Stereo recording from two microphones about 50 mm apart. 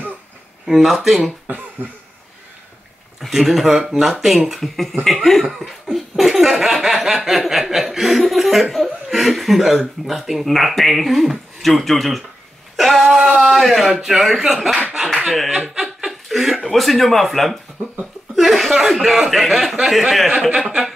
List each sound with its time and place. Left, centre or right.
0.7 s speech: centre
1.8 s speech: right
3.2 s speech: centre
5.6 s a sound: centre
8.7 s speech: centre
15.8 s chuckle: centre
16.6 s a man's voice: centre